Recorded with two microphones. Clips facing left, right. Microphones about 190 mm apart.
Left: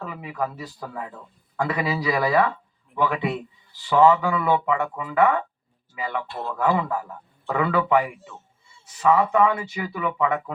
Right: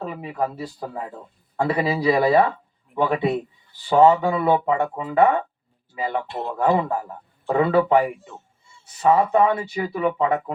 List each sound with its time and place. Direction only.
0.0 s speech: 30° right (ahead or behind)
6.2 s a man's voice: 20° right (ahead or behind)
6.6 s speech: 35° right (ahead or behind)